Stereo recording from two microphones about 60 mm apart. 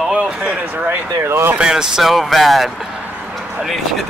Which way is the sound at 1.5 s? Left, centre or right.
Centre.